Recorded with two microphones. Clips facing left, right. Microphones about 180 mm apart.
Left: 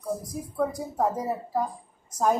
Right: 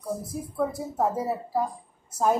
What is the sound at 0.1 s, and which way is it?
Speech, 5° right (ahead or behind).